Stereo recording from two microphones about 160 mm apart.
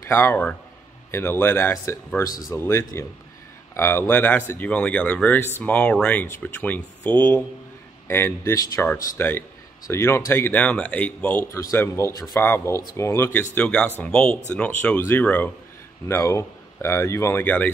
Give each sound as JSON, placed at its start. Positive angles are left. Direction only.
{"t": 0.1, "sound": "speech", "side_deg": 15}